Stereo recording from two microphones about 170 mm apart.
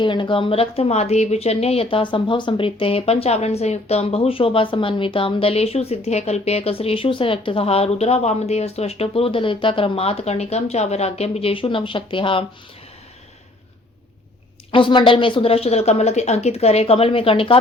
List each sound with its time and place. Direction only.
0.0 s speech: 30° left (ahead or behind)
14.7 s speech: 30° left (ahead or behind)